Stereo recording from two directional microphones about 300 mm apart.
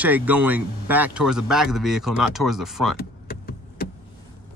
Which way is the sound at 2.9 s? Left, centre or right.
Left.